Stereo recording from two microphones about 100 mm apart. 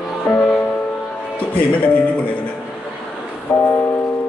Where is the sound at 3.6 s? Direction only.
20° left (ahead or behind).